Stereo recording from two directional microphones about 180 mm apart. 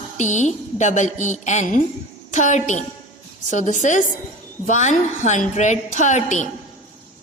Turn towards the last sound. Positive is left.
turn(degrees=40)  # may be behind; listen again after turning